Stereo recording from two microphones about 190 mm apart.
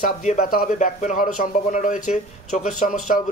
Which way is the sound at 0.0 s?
40° left (ahead or behind).